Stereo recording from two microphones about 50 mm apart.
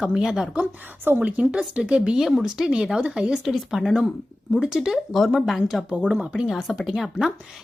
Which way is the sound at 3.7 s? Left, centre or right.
Centre.